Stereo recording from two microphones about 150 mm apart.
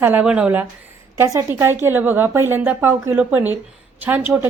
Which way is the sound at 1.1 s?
20° right (ahead or behind).